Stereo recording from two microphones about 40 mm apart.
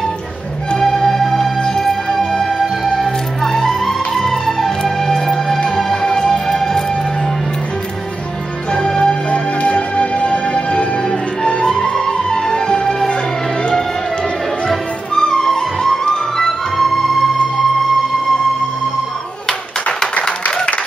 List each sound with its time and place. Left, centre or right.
0.7 s music: centre
1.6 s music: centre
8.7 s music: centre
9.3 s music: left; by 13.1 s centre
13.1 s music: left
14.7 s music: centre
19.4 s clapping: centre